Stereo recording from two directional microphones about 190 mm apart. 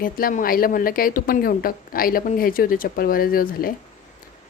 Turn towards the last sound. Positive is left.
turn(degrees=50)  # may be behind; listen again after turning